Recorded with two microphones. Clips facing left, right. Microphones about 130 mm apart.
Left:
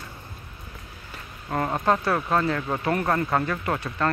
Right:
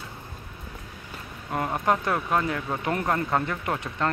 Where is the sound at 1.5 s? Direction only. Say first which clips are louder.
Left 2 dB; 15° right (ahead or behind).